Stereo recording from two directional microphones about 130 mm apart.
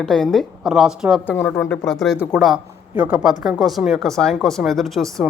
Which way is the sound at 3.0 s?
10° right (ahead or behind).